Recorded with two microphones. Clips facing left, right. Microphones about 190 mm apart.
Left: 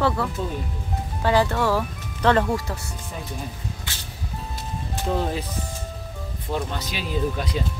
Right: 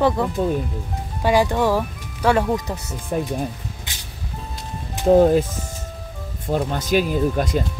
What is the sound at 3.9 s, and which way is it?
Music, 20° right (ahead or behind).